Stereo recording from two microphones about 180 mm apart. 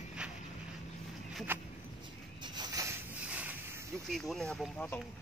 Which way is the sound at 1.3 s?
10° right (ahead or behind).